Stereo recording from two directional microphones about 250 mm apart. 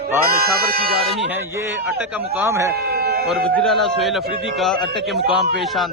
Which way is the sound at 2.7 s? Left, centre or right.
Right.